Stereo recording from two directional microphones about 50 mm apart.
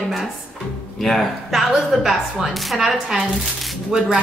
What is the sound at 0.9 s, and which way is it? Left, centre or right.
A woman's voice, centre.